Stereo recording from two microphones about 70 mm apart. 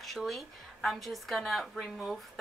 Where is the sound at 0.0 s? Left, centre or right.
Centre.